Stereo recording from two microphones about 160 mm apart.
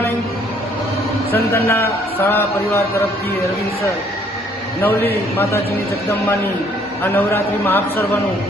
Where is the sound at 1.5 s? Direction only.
15° left (ahead or behind).